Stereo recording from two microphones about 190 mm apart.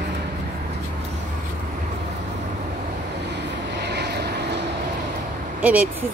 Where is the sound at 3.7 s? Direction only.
60° right (ahead or behind).